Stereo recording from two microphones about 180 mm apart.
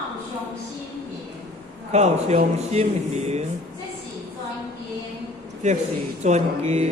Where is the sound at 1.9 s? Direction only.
40° right (ahead or behind).